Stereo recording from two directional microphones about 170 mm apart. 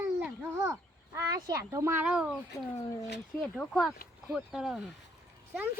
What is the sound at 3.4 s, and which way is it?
A child's voice, 5° left (ahead or behind).